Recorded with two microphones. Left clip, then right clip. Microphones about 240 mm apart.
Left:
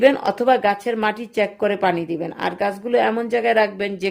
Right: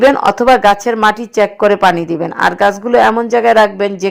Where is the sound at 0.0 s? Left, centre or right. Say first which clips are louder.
Right 7 dB; centre.